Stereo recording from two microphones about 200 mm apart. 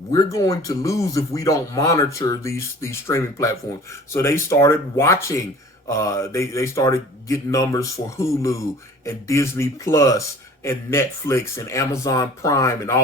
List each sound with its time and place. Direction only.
0.1 s a man's voice: 15° left (ahead or behind)